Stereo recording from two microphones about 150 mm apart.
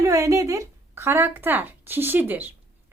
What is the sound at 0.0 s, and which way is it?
A woman's voice, 20° right (ahead or behind).